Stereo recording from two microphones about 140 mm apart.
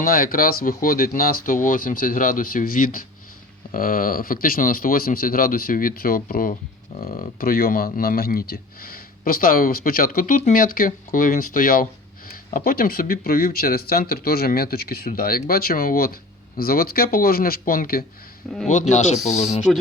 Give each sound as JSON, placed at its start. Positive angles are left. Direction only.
{"t": 0.0, "sound": "speech", "side_deg": 90}
{"t": 18.7, "sound": "speech", "side_deg": 60}